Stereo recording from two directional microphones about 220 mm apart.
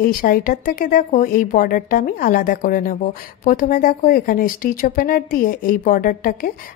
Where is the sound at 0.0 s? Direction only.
40° left (ahead or behind).